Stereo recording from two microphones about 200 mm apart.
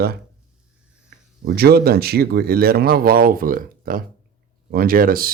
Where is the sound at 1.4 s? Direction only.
50° right (ahead or behind).